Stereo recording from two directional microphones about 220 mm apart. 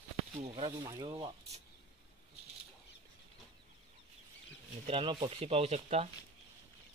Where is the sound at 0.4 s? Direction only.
30° right (ahead or behind).